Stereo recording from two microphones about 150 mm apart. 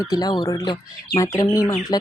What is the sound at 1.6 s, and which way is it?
Speech, 35° left (ahead or behind).